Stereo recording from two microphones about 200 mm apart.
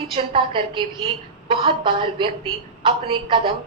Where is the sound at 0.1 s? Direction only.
25° right (ahead or behind).